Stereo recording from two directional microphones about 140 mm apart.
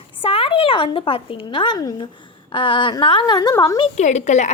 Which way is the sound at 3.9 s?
55° left (ahead or behind).